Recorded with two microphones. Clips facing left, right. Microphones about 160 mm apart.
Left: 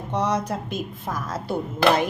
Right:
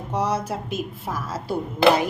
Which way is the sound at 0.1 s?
10° right (ahead or behind).